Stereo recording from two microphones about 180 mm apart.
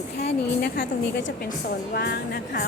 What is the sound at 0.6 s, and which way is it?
A woman's voice, 70° left (ahead or behind).